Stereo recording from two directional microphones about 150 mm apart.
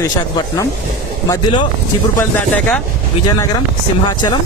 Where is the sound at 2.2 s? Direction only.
10° left (ahead or behind).